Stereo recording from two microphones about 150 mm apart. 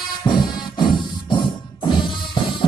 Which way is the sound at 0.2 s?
30° left (ahead or behind).